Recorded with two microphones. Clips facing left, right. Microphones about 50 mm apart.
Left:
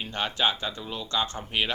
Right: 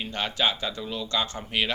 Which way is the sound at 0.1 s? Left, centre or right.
Left.